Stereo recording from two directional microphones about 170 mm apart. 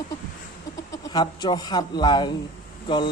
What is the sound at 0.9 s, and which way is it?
A man's voice, 20° left (ahead or behind).